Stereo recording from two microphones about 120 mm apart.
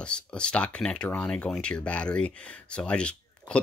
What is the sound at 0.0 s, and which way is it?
Speech, 10° left (ahead or behind).